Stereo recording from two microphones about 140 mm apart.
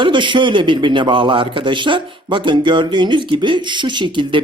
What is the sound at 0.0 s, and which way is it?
A man's voice, 35° right (ahead or behind).